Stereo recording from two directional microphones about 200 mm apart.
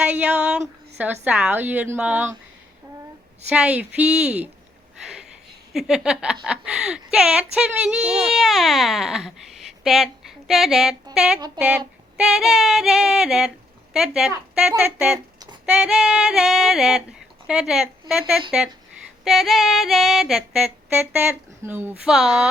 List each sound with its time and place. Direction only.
0.0 s female singing: 5° right (ahead or behind)
0.9 s a woman's voice: 10° right (ahead or behind)
3.5 s female singing: 5° right (ahead or behind)
4.9 s a sound: 5° right (ahead or behind)
5.7 s female singing: 5° right (ahead or behind)
9.8 s speech: centre (ahead or behind)
11.1 s female singing: 5° right (ahead or behind)
13.9 s a woman's voice: 5° right (ahead or behind)
14.8 s female singing: centre (ahead or behind)